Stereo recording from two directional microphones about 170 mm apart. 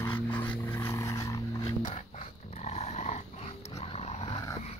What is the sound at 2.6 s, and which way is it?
Dog, 40° left (ahead or behind).